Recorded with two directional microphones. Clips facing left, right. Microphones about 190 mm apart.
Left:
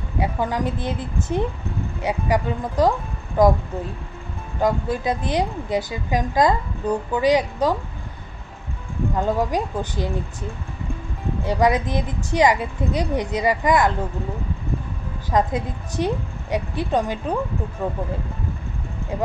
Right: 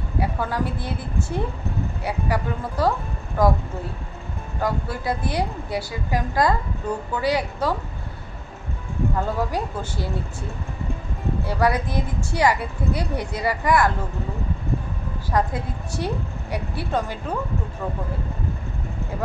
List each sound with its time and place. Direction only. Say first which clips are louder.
0.2 s a woman's voice: left 2 dB; 20° left (ahead or behind)
4.6 s a woman's voice: left 5 dB; 20° left (ahead or behind)
9.1 s speech: left 5 dB; 15° left (ahead or behind)
11.4 s a woman's voice: left 4 dB; 20° left (ahead or behind)
15.3 s a woman's voice: left 3 dB; 20° left (ahead or behind)